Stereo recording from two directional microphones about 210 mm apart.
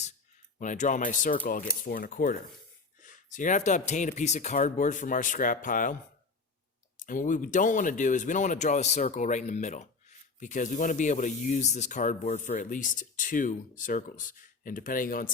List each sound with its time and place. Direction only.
0.6 s speech: 35° left (ahead or behind)